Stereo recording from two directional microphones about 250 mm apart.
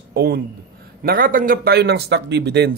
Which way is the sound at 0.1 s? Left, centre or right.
Right.